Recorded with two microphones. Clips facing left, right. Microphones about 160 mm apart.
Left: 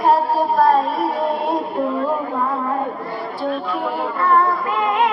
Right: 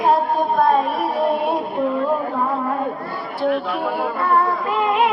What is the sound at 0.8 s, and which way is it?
Female singing, 25° left (ahead or behind).